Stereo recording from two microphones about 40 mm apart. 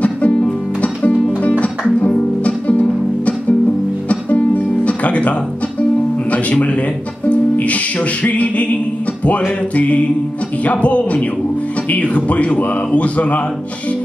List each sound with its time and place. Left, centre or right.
0.3 s music: left
6.3 s music: left
9.8 s speech: left